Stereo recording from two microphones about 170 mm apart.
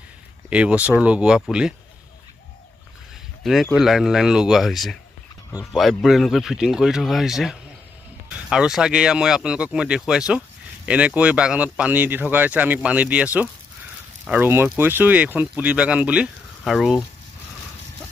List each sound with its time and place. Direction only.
0.5 s speech: 5° right (ahead or behind)
3.7 s speech: centre (ahead or behind)
5.5 s speech: 20° left (ahead or behind)
5.8 s speech: centre (ahead or behind)